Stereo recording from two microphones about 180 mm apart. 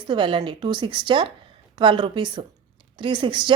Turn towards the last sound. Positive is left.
turn(degrees=-25)  # may be behind; listen again after turning